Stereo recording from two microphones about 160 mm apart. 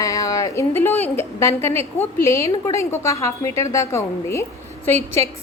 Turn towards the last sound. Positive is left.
turn(degrees=15)  # may be behind; listen again after turning